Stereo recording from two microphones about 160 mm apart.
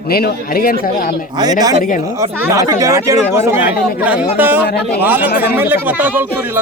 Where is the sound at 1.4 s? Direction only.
25° right (ahead or behind).